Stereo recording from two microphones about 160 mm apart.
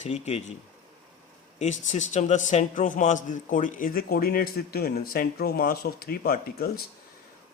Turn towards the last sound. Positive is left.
turn(degrees=70)  # may be behind; listen again after turning